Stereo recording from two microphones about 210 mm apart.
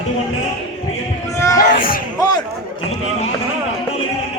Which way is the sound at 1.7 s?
40° left (ahead or behind).